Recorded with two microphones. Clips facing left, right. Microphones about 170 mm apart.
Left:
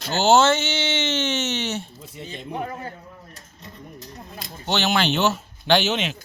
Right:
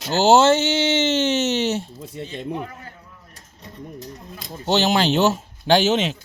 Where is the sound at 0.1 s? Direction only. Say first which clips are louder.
Right 3 dB; 35° right (ahead or behind).